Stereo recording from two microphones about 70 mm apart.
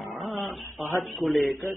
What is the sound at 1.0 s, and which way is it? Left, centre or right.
Speech, centre.